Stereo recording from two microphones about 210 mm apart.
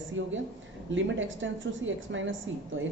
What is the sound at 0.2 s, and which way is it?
A woman's voice, 65° right (ahead or behind).